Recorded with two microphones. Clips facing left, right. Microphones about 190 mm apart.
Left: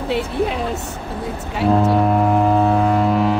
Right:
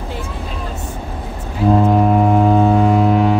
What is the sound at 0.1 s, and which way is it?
Speech, 70° left (ahead or behind).